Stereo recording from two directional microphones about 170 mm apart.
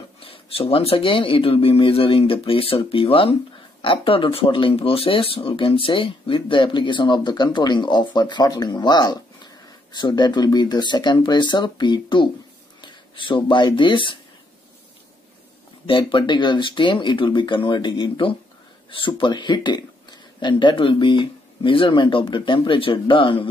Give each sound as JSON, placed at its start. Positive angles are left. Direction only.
{"t": 0.2, "sound": "speech", "side_deg": 35}
{"t": 15.9, "sound": "speech", "side_deg": 30}